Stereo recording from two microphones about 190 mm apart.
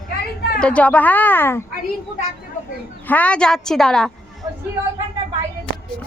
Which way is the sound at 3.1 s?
5° left (ahead or behind).